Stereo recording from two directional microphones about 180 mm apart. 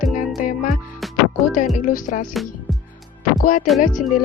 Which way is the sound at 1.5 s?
45° left (ahead or behind).